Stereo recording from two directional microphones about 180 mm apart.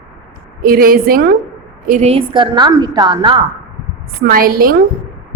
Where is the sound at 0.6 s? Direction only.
55° right (ahead or behind).